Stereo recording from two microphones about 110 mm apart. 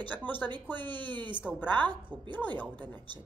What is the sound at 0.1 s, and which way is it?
Speech, 15° left (ahead or behind).